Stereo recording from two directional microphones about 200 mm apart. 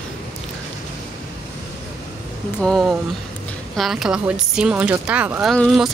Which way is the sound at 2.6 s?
Centre (ahead or behind).